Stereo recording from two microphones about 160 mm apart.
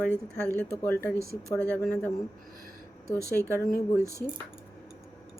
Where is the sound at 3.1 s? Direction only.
20° left (ahead or behind).